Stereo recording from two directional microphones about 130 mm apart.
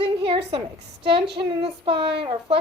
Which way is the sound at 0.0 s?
45° right (ahead or behind).